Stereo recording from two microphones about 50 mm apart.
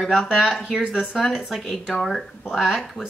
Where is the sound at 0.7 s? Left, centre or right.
Centre.